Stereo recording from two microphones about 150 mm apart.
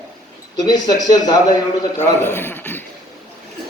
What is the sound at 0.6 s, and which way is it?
A man's voice, 25° left (ahead or behind).